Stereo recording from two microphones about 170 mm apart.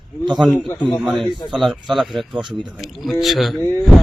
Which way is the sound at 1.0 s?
Centre (ahead or behind).